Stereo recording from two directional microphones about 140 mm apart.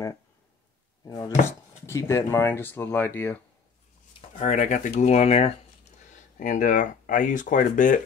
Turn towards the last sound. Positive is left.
turn(degrees=65)  # may be behind; listen again after turning